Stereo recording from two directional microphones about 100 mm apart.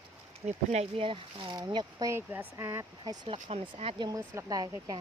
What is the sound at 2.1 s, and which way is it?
Speech, 20° right (ahead or behind).